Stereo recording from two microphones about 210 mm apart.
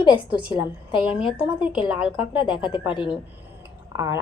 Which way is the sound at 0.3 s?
5° right (ahead or behind).